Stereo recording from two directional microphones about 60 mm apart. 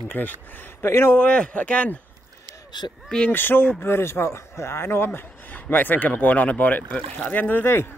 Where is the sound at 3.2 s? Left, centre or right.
Left.